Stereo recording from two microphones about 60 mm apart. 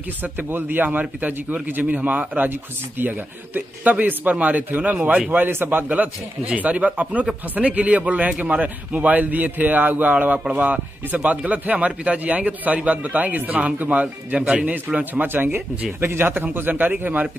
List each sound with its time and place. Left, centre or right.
0.2 s a man's voice: right
5.9 s a man's voice: right
15.2 s speech: right